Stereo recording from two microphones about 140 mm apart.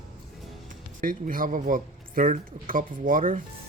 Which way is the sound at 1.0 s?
85° right.